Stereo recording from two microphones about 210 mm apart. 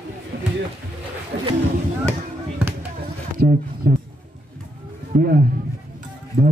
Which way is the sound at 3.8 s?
50° right (ahead or behind).